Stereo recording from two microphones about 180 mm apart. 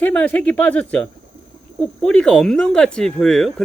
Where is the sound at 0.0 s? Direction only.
5° left (ahead or behind).